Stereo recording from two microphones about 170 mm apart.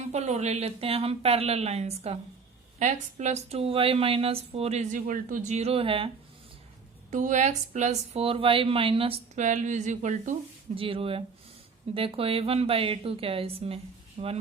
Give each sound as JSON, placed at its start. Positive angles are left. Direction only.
{"t": 0.1, "sound": "speech", "side_deg": -40}
{"t": 7.1, "sound": "speech", "side_deg": -45}
{"t": 10.8, "sound": "speech", "side_deg": -30}